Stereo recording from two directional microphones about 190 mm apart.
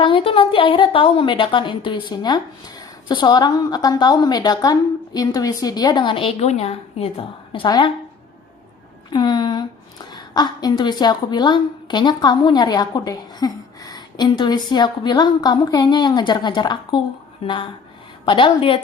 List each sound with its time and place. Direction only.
0.0 s a woman's voice: 25° left (ahead or behind)
9.1 s a woman's voice: 25° left (ahead or behind)